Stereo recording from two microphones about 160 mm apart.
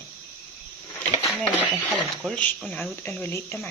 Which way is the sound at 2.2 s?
5° left (ahead or behind).